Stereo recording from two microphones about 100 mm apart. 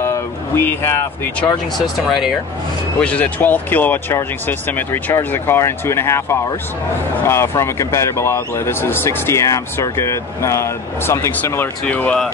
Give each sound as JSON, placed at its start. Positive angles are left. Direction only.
{"t": 0.0, "sound": "a sound", "side_deg": 25}
{"t": 2.0, "sound": "speech", "side_deg": 0}
{"t": 3.0, "sound": "a man's voice", "side_deg": 15}
{"t": 11.8, "sound": "speech", "side_deg": 15}